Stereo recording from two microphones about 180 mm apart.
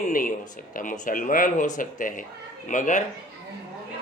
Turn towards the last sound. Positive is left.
turn(degrees=45)  # may be behind; listen again after turning